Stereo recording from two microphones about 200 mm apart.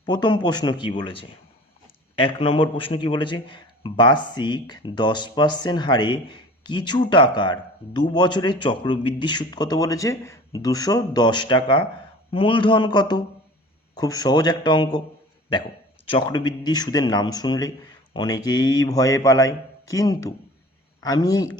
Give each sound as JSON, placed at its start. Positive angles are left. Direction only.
{"t": 0.0, "sound": "a man's voice", "side_deg": 20}
{"t": 16.0, "sound": "a man's voice", "side_deg": 25}